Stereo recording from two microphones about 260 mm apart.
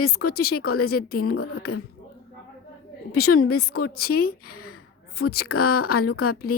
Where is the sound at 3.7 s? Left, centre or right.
Left.